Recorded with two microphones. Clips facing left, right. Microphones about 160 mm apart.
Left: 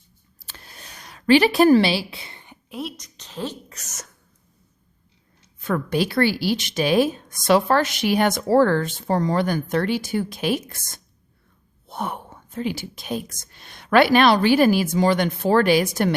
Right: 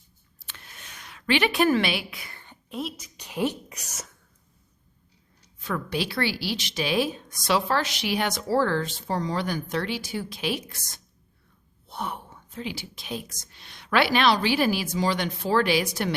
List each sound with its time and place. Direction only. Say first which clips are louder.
0.3 s a sound: left 3 dB; 35° left (ahead or behind); by 2.6 s 20° left (ahead or behind)
2.6 s a woman's voice: left 1 dB; centre (ahead or behind)
3.2 s speech: right 4 dB; 15° right (ahead or behind)
5.5 s a woman's voice: left 6 dB; 50° left (ahead or behind)